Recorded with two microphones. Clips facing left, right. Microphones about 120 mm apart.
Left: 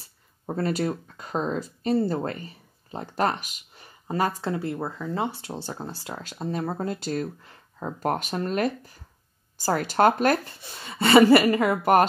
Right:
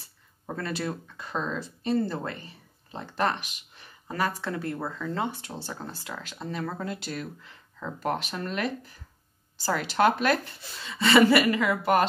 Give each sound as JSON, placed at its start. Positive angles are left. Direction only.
{"t": 0.5, "sound": "speech", "side_deg": 35}
{"t": 4.1, "sound": "a woman's voice", "side_deg": 25}